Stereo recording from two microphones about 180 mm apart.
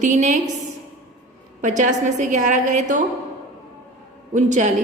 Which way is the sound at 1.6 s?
40° right (ahead or behind).